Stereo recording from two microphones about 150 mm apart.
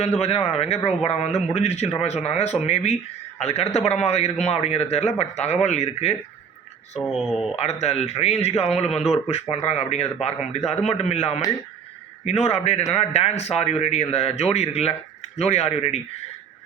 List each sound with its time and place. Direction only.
0.0 s a man's voice: 45° left (ahead or behind)
7.1 s speech: 5° right (ahead or behind)
7.5 s a man's voice: 45° left (ahead or behind)